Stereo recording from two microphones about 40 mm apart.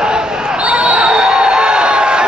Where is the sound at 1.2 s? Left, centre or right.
Centre.